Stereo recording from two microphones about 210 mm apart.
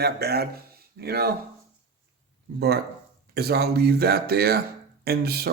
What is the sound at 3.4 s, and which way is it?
Speech, 50° right (ahead or behind).